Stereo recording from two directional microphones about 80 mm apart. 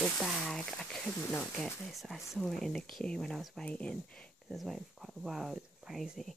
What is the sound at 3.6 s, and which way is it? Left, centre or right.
Speech, centre.